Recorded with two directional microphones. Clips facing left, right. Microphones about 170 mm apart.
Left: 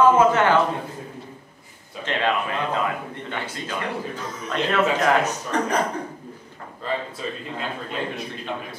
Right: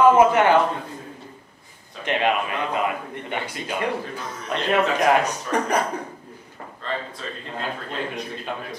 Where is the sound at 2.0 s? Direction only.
15° right (ahead or behind).